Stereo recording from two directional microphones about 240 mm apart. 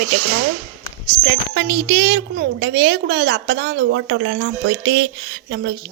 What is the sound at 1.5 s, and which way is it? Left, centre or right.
A woman's voice, right.